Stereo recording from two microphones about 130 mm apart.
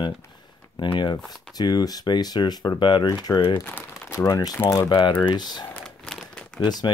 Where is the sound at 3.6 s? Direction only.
15° left (ahead or behind).